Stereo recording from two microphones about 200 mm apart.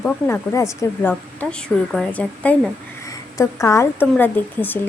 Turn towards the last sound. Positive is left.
turn(degrees=10)  # may be behind; listen again after turning